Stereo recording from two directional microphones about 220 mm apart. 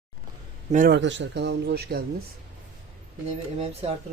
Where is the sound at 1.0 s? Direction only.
55° right (ahead or behind).